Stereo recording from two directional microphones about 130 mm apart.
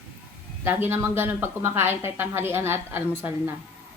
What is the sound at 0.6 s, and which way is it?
A woman's voice, 15° right (ahead or behind).